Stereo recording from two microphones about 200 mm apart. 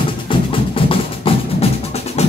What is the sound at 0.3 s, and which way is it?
Music, 25° left (ahead or behind).